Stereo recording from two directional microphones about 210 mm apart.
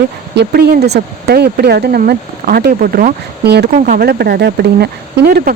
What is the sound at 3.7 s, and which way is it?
Speech, 40° right (ahead or behind).